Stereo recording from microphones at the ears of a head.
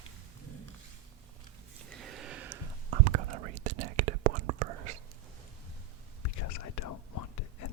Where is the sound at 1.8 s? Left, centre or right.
Right.